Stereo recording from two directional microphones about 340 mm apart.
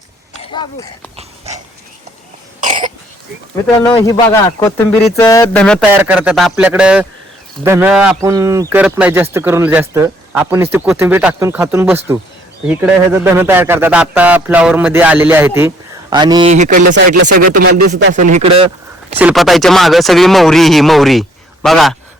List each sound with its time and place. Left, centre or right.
0.5 s speech: centre
2.6 s cough: right
3.8 s speech: centre
19.2 s speech: centre